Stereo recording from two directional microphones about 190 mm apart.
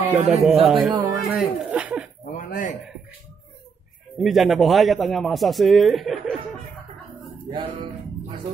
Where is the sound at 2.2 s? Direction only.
45° left (ahead or behind).